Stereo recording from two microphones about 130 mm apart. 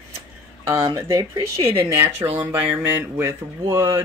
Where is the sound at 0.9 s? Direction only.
20° right (ahead or behind).